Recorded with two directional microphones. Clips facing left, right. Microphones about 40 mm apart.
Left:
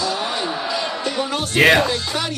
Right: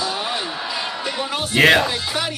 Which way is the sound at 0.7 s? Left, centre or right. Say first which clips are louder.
Left 3 dB; centre.